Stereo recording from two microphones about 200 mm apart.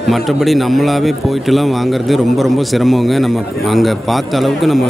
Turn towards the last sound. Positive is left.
turn(degrees=0)  # may be behind; listen again after turning